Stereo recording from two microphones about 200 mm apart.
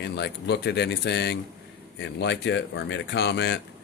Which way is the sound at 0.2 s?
55° left (ahead or behind).